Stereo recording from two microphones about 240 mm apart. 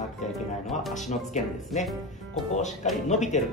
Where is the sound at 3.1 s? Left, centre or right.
Left.